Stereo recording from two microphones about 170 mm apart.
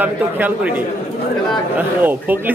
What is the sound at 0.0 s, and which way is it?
Speech, 10° right (ahead or behind).